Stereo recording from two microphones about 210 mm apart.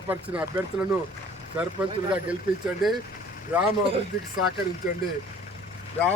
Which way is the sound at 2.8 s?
Centre (ahead or behind).